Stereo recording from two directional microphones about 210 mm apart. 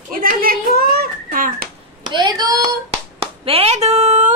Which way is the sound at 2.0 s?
20° right (ahead or behind).